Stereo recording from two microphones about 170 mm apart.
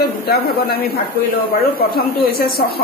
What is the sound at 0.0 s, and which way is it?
A man's voice, 65° left (ahead or behind).